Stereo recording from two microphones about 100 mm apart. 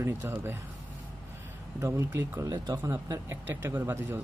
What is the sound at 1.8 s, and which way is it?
Speech, 25° right (ahead or behind).